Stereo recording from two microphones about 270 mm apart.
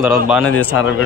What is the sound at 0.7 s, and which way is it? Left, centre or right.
Speech, left.